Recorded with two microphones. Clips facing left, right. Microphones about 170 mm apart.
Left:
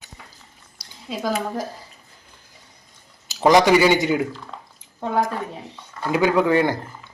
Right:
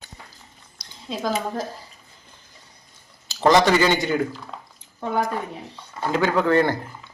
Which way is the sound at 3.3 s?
15° left (ahead or behind).